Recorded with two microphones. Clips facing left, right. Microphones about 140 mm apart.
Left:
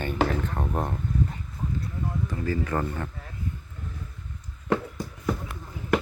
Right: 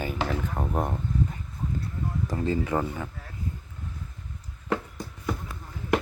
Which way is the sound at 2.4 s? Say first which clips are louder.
Right 2 dB; 20° right (ahead or behind).